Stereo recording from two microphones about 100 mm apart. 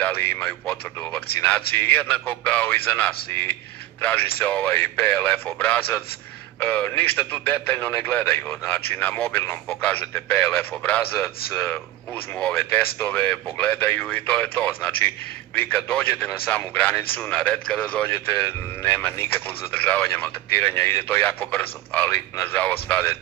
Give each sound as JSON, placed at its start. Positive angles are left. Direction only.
{"t": 0.0, "sound": "a man's voice", "side_deg": 20}